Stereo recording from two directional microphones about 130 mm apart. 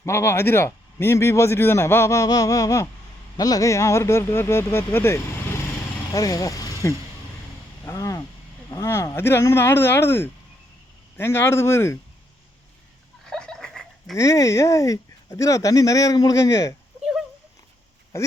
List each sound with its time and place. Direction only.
0.0 s a man's voice: 20° left (ahead or behind)
7.9 s a sound: 25° left (ahead or behind)
8.7 s a man's voice: 20° left (ahead or behind)
13.3 s dog: 5° left (ahead or behind)
14.2 s a man's voice: 25° left (ahead or behind)
17.0 s a sound: centre (ahead or behind)
18.1 s a man's voice: 25° left (ahead or behind)